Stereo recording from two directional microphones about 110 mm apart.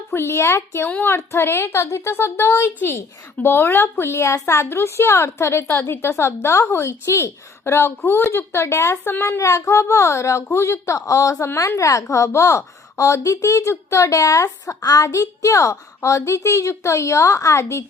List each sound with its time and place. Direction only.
0.1 s a woman's voice: 20° left (ahead or behind)